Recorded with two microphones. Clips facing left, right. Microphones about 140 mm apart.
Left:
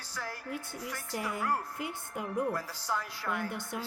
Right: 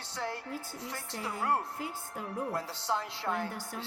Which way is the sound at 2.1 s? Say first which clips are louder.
Left 6 dB; 15° left (ahead or behind).